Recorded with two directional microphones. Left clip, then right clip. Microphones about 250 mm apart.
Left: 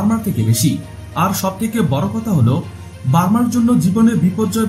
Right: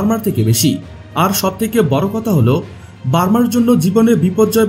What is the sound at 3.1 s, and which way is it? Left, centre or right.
Speech, right.